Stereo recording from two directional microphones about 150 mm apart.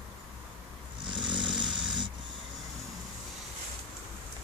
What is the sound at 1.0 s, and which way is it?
Snoring, 30° right (ahead or behind).